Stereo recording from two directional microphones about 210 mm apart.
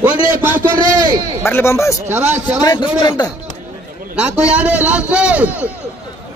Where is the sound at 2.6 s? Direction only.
20° left (ahead or behind).